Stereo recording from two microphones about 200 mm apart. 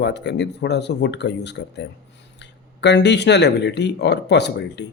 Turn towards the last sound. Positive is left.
turn(degrees=55)  # may be behind; listen again after turning